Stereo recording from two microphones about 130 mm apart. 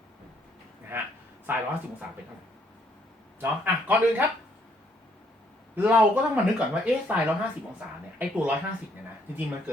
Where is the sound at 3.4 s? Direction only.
10° right (ahead or behind).